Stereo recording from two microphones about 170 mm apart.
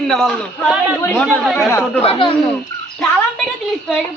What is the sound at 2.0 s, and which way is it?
Speech, 35° left (ahead or behind).